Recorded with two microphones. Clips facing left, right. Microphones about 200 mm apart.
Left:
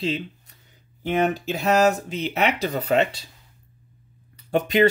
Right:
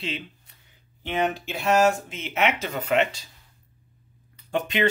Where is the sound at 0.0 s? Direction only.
40° left (ahead or behind).